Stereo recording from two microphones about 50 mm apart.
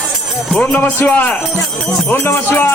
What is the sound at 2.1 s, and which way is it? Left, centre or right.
Music, left.